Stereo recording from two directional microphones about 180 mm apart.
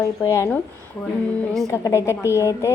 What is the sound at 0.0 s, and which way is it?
Speech, 15° left (ahead or behind).